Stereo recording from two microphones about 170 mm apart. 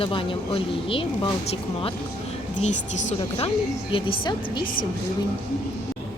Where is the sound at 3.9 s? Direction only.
30° left (ahead or behind).